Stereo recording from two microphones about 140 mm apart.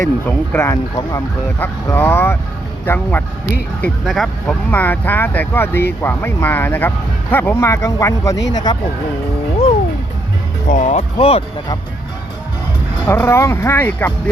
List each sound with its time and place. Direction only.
0.3 s speech: 15° left (ahead or behind)
4.0 s speech: centre (ahead or behind)
4.7 s speech: 10° left (ahead or behind); by 8.8 s 30° left (ahead or behind)
10.7 s speech: 65° left (ahead or behind)
11.2 s speech: 45° left (ahead or behind)
13.1 s speech: 15° left (ahead or behind)